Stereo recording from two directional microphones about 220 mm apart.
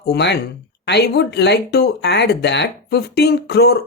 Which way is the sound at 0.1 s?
50° left (ahead or behind).